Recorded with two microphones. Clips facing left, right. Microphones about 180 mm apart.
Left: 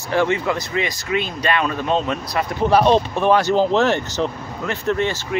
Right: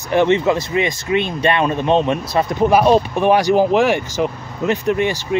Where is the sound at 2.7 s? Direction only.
10° right (ahead or behind).